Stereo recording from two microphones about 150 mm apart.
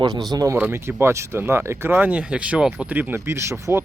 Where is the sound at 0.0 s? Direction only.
25° right (ahead or behind).